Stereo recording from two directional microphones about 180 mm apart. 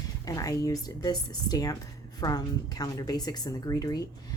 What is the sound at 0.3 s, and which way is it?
Speech, 20° left (ahead or behind).